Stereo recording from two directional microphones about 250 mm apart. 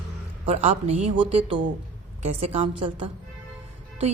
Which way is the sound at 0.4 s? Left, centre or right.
Right.